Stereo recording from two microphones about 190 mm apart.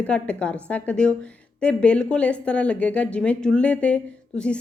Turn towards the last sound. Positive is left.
turn(degrees=5)  # may be behind; listen again after turning